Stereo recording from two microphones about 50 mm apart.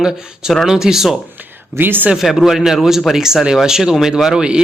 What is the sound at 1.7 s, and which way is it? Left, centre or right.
Speech, right.